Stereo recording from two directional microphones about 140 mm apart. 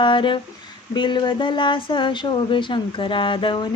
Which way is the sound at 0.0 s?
35° left (ahead or behind).